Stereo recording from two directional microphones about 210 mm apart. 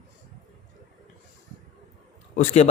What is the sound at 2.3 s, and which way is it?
Speech, 35° left (ahead or behind).